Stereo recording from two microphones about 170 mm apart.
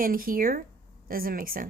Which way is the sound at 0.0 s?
55° right (ahead or behind).